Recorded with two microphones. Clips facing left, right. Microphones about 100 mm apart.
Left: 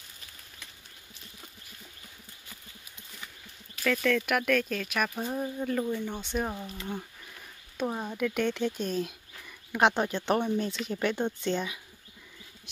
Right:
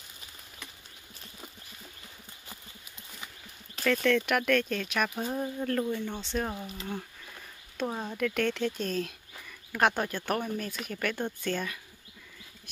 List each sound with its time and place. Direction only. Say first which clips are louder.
3.8 s speech: right 1 dB; centre (ahead or behind)
7.7 s speech: left 1 dB; 10° left (ahead or behind)